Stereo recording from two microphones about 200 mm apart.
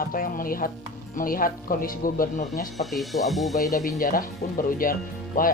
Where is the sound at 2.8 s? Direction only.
Centre (ahead or behind).